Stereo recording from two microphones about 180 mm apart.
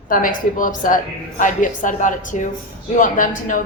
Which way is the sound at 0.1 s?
50° left (ahead or behind).